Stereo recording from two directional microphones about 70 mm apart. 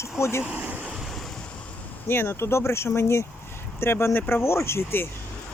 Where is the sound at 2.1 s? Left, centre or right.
Left.